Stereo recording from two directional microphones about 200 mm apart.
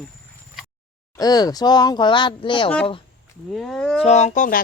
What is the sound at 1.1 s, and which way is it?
Speech, 20° left (ahead or behind).